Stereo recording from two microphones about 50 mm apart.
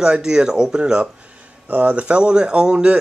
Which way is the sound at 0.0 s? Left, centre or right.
Centre.